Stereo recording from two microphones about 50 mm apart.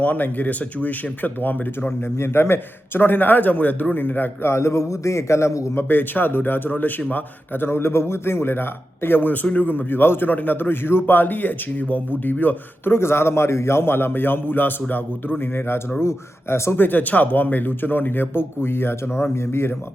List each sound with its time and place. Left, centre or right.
0.0 s speech: left
2.1 s speech: left
4.4 s a man's voice: left
5.9 s a man's voice: left
10.2 s speech: left
12.9 s a man's voice: left
16.0 s speech: left
16.7 s speech: left